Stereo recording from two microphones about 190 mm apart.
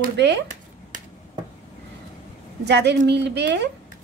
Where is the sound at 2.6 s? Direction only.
65° right (ahead or behind).